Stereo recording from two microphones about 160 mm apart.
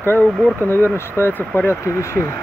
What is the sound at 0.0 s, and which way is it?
Speech, 10° left (ahead or behind).